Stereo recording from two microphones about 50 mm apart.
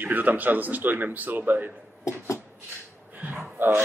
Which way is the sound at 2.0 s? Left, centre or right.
Left.